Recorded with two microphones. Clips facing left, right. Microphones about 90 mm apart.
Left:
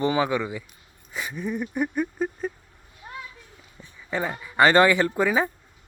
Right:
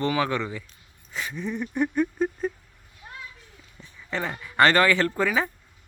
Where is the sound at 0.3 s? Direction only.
10° left (ahead or behind).